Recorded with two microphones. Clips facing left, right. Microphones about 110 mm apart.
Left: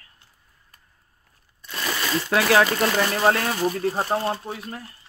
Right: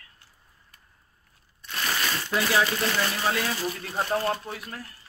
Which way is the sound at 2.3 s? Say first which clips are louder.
Left 6 dB; 90° left.